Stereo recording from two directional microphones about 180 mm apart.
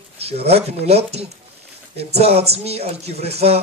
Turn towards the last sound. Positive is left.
turn(degrees=-35)  # may be behind; listen again after turning